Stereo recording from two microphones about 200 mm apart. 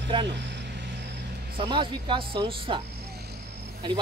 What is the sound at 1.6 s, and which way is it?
Speech, 25° right (ahead or behind).